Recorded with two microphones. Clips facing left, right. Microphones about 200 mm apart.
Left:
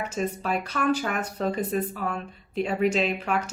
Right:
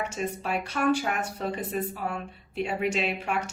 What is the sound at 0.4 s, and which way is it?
Speech, 40° left (ahead or behind).